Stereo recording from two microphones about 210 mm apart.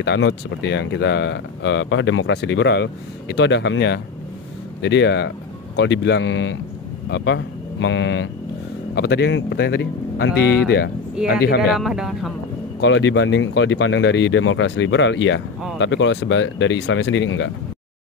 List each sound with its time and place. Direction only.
0.0 s speech: 55° left (ahead or behind)
8.9 s speech: 50° left (ahead or behind)
11.7 s speech: centre (ahead or behind)
12.8 s speech: 60° left (ahead or behind)